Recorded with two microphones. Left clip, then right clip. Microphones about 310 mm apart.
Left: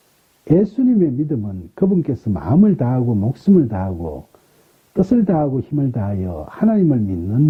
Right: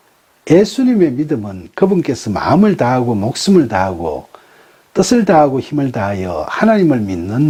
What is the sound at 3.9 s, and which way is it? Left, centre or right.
Speech, right.